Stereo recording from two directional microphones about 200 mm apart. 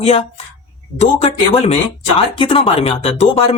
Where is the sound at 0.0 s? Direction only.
30° left (ahead or behind).